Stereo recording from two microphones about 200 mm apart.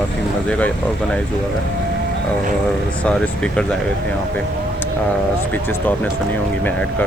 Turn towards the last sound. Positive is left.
turn(degrees=5)  # may be behind; listen again after turning